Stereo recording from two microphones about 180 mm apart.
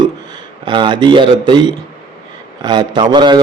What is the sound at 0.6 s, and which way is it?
A man's voice, 25° right (ahead or behind).